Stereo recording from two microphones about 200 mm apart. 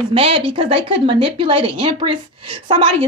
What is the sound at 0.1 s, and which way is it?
Speech, 30° right (ahead or behind).